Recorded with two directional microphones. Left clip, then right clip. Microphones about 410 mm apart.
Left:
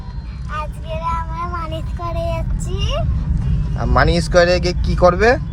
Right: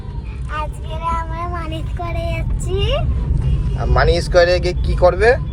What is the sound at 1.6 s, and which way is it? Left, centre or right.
Child singing, centre.